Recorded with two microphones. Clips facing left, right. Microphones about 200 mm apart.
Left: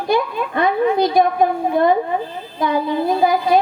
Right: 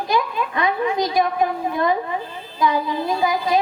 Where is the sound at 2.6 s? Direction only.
55° left (ahead or behind).